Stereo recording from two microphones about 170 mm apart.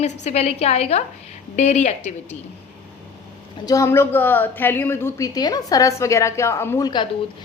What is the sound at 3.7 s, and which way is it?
A woman's voice, 15° left (ahead or behind).